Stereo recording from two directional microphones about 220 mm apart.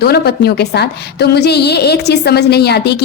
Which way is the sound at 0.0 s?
45° left (ahead or behind).